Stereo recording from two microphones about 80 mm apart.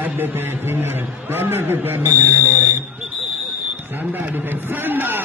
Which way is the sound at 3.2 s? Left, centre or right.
Centre.